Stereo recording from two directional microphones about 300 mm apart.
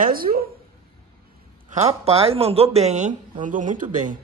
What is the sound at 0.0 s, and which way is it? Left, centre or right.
Speech, right.